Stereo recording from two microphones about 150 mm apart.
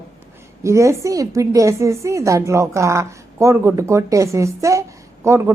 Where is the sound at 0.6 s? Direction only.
20° right (ahead or behind).